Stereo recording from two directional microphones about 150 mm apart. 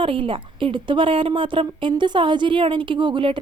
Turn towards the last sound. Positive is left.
turn(degrees=-30)  # may be behind; listen again after turning